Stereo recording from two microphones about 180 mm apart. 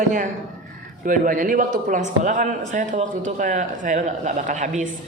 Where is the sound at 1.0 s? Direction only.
50° right (ahead or behind).